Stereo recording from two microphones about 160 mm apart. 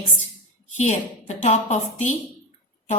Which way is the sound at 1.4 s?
45° left (ahead or behind).